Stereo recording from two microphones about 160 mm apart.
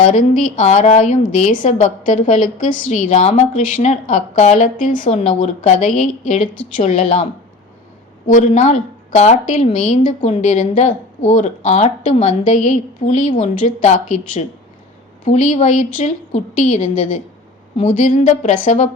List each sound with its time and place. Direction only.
0.0 s a woman's voice: 50° left (ahead or behind)
8.3 s a woman's voice: 50° left (ahead or behind)